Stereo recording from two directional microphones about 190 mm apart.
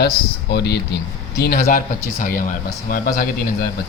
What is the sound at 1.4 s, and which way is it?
Speech, 50° left (ahead or behind).